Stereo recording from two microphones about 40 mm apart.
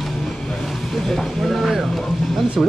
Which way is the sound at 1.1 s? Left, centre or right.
Centre.